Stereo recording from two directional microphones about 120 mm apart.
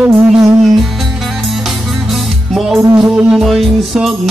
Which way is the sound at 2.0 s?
Centre (ahead or behind).